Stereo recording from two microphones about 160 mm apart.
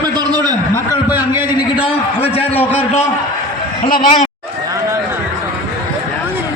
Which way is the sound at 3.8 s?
55° left (ahead or behind).